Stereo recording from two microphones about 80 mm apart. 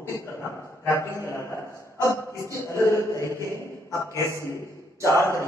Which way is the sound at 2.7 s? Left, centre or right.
Left.